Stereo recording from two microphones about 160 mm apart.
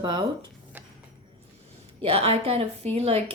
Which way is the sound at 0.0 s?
30° right (ahead or behind).